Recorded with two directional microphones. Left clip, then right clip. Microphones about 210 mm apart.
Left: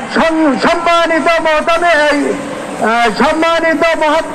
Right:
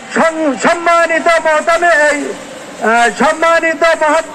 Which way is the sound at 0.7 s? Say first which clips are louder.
Right 3 dB; 35° right (ahead or behind).